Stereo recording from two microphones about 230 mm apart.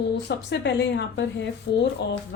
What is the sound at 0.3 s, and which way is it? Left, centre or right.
Speech, left.